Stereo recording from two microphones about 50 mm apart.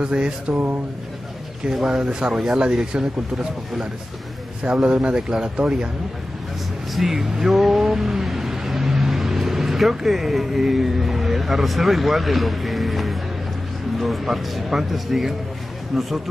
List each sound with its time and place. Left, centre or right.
0.0 s a sound: centre
1.9 s speech: centre
4.9 s speech: centre
7.0 s speech: centre